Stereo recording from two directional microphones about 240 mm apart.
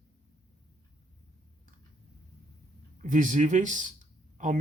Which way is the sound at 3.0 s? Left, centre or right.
Right.